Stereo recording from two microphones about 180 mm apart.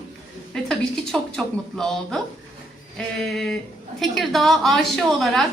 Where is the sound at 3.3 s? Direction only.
Centre (ahead or behind).